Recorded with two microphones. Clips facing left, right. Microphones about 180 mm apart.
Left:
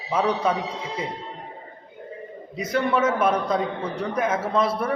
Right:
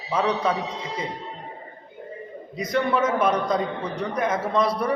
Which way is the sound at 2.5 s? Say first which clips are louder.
Even; 5° left (ahead or behind).